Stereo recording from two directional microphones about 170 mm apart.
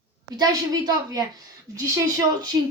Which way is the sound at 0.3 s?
20° right (ahead or behind).